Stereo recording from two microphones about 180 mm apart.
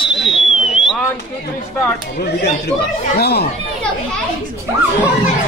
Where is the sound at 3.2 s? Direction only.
60° left (ahead or behind).